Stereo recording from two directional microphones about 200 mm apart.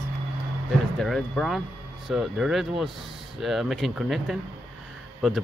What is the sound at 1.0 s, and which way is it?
Speech, centre (ahead or behind).